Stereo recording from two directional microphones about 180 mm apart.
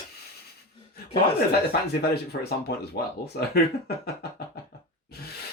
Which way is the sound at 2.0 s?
60° left (ahead or behind).